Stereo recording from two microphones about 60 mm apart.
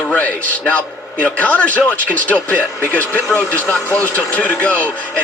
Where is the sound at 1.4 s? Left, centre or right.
Left.